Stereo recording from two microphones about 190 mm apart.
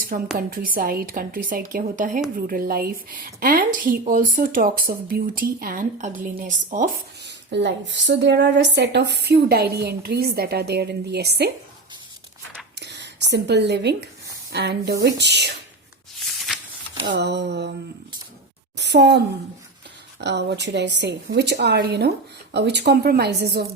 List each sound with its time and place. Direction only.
0.3 s a woman's voice: 50° right (ahead or behind)
7.2 s a woman's voice: 65° right (ahead or behind)
12.7 s a sound: 65° right (ahead or behind)
14.5 s a woman's voice: 60° right (ahead or behind)
17.1 s a woman's voice: 65° right (ahead or behind)
18.8 s a woman's voice: 65° right (ahead or behind)
20.2 s a woman's voice: 65° right (ahead or behind)